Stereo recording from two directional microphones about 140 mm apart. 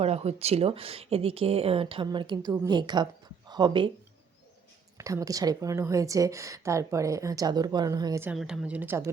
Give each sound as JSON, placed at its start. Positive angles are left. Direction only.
{"t": 0.0, "sound": "a woman's voice", "side_deg": -50}
{"t": 4.9, "sound": "a woman's voice", "side_deg": -25}
{"t": 8.4, "sound": "a woman's voice", "side_deg": -5}